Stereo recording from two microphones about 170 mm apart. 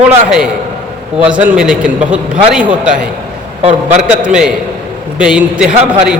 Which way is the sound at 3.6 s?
35° right (ahead or behind).